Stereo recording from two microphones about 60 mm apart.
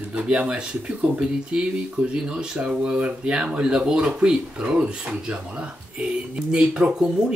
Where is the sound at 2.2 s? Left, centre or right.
Centre.